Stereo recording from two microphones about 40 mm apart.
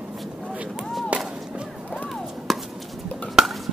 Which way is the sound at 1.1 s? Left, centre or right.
Right.